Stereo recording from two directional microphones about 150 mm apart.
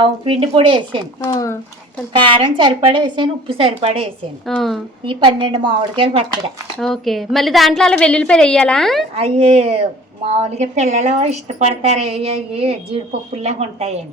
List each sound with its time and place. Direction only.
0.0 s a woman's voice: 35° right (ahead or behind)
1.2 s speech: 20° left (ahead or behind)
2.1 s a woman's voice: 35° right (ahead or behind)
4.4 s a woman's voice: centre (ahead or behind)
5.0 s a woman's voice: 35° right (ahead or behind)
6.7 s a woman's voice: centre (ahead or behind)
9.1 s a woman's voice: 40° right (ahead or behind)